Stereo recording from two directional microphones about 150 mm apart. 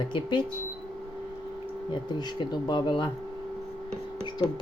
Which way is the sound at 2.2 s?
30° left (ahead or behind).